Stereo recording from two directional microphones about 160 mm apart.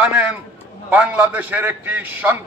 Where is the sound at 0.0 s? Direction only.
5° right (ahead or behind).